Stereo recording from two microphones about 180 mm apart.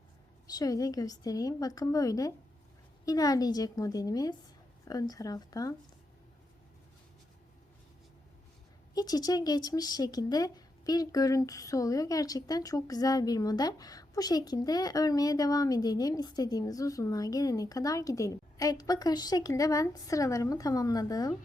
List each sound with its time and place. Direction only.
0.5 s speech: 20° left (ahead or behind)
9.0 s speech: 20° left (ahead or behind)